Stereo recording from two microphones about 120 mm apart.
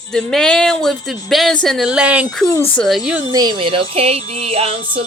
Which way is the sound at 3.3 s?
35° right (ahead or behind).